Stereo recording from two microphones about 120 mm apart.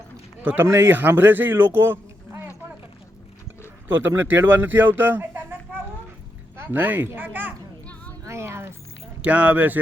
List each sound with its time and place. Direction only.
0.4 s a man's voice: 20° right (ahead or behind)
3.8 s a child's voice: 15° right (ahead or behind)
8.2 s a sound: 25° right (ahead or behind)
9.2 s a child's voice: 10° right (ahead or behind)